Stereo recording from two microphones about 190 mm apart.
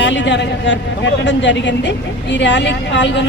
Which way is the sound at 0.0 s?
70° left (ahead or behind).